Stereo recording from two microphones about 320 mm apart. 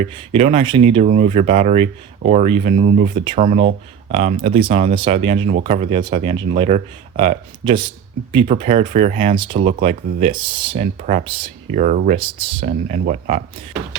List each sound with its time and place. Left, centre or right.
0.0 s speech: centre